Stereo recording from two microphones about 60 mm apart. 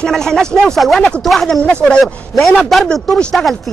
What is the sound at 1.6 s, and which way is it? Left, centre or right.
A man's voice, centre.